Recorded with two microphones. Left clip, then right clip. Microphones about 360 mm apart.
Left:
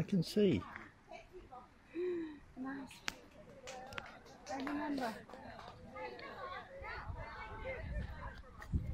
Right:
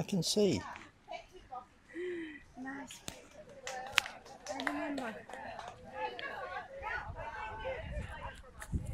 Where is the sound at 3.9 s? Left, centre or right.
Right.